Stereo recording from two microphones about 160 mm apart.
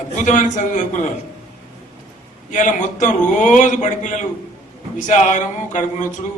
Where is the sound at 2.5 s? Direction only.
50° left (ahead or behind).